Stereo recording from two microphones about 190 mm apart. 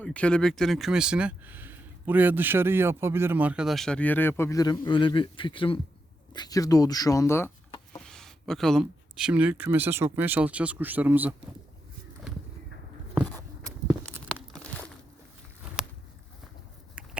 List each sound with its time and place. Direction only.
0.0 s speech: 5° left (ahead or behind)
7.9 s speech: 5° left (ahead or behind)
13.7 s walk: 15° right (ahead or behind)
14.3 s crumpling: 5° left (ahead or behind)
15.8 s walk: centre (ahead or behind)